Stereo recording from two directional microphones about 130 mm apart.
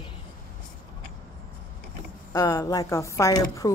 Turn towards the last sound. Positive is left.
turn(degrees=25)  # may be behind; listen again after turning